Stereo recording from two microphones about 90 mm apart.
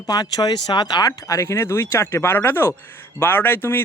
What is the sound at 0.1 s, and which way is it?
Speech, 50° left (ahead or behind).